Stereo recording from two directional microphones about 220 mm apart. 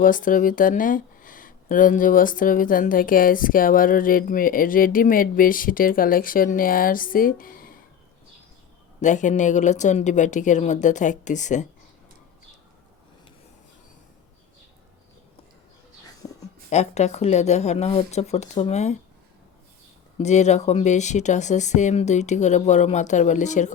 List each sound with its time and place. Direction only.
0.0 s speech: 40° left (ahead or behind)
9.0 s speech: 35° left (ahead or behind)
16.6 s speech: 30° left (ahead or behind)
20.1 s speech: 30° left (ahead or behind)